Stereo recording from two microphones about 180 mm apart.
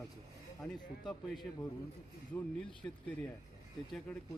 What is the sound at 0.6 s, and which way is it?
Speech, 25° left (ahead or behind).